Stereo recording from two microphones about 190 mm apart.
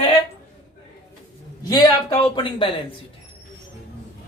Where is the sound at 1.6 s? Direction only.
20° left (ahead or behind).